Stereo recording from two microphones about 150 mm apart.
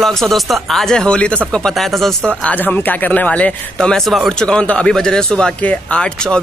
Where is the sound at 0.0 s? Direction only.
Centre (ahead or behind).